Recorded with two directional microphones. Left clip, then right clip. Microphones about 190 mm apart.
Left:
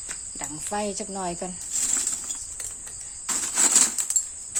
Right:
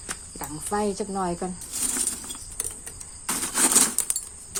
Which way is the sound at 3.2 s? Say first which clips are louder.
Even; centre (ahead or behind).